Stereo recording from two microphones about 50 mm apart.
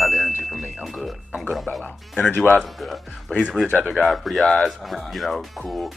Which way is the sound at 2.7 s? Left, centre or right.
Centre.